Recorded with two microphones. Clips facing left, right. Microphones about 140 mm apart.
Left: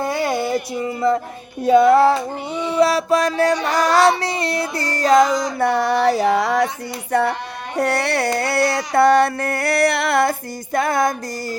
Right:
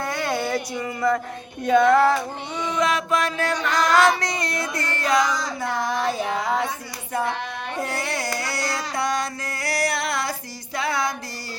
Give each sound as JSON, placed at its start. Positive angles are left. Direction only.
{"t": 0.3, "sound": "a sound", "side_deg": 5}
{"t": 0.8, "sound": "music", "side_deg": 25}
{"t": 1.9, "sound": "a sound", "side_deg": 30}
{"t": 5.5, "sound": "speech", "side_deg": 65}
{"t": 7.1, "sound": "speech", "side_deg": 70}
{"t": 8.4, "sound": "music", "side_deg": 60}